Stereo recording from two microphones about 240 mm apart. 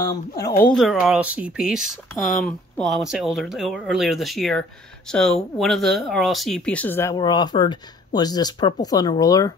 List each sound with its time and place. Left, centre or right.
0.0 s speech: centre
0.7 s speech: centre